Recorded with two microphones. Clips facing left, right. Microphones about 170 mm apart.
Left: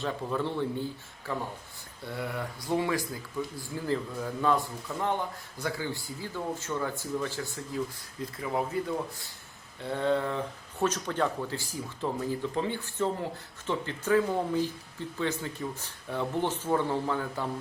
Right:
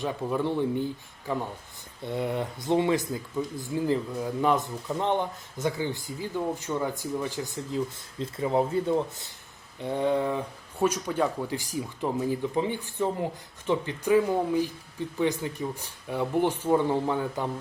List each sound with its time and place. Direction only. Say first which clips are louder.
0.0 s speech: right 3 dB; 15° right (ahead or behind)
8.2 s speech: right 6 dB; 30° right (ahead or behind)